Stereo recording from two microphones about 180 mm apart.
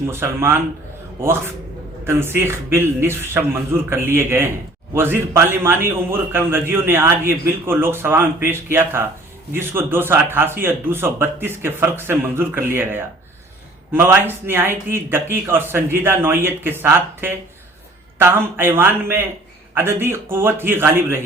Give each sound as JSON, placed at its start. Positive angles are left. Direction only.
{"t": 0.1, "sound": "a man's voice", "side_deg": -15}
{"t": 2.0, "sound": "a man's voice", "side_deg": -15}